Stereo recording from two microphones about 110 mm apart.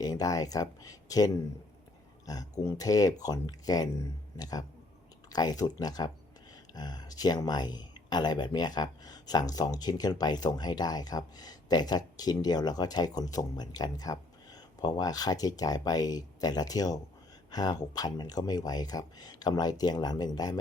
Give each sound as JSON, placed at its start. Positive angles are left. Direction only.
{"t": 0.0, "sound": "speech", "side_deg": 35}